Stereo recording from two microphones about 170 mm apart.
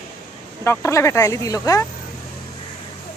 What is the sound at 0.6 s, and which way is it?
Speech, 15° left (ahead or behind).